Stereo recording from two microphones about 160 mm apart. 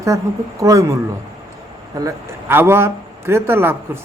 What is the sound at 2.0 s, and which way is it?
A man's voice, 15° right (ahead or behind).